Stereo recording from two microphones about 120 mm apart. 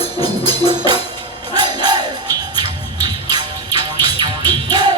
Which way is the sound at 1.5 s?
35° right (ahead or behind).